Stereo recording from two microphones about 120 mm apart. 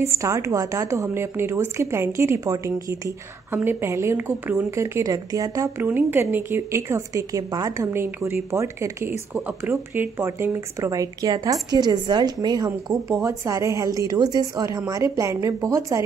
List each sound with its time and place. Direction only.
0.0 s speech: 25° right (ahead or behind)
5.8 s speech: 15° right (ahead or behind)